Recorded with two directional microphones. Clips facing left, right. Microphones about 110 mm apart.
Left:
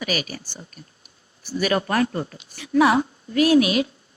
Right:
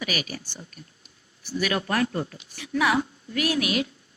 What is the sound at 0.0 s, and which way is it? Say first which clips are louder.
Speech: left 4 dB; 35° left (ahead or behind).